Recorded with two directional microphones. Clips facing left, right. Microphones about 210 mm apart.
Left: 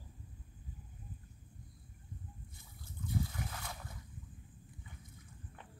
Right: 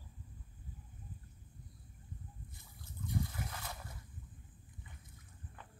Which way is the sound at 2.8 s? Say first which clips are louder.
Left 1 dB; centre (ahead or behind).